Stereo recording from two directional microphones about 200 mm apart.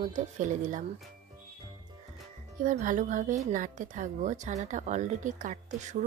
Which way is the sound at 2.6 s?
40° right (ahead or behind).